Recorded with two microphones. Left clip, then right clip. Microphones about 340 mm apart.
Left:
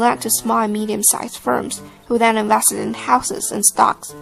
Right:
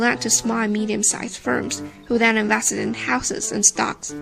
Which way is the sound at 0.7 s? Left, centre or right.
Centre.